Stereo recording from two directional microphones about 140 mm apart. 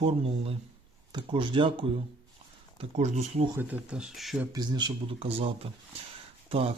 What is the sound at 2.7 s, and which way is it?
Speech, 55° right (ahead or behind).